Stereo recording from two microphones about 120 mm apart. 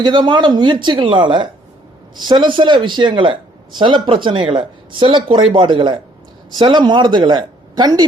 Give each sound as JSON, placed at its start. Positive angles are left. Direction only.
{"t": 0.0, "sound": "speech", "side_deg": -40}